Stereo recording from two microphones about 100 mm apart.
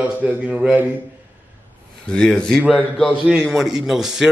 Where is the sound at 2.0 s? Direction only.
10° left (ahead or behind).